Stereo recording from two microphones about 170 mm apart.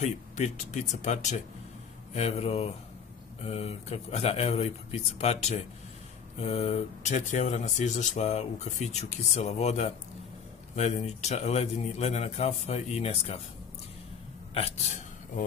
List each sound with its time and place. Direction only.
0.0 s a man's voice: 45° left (ahead or behind)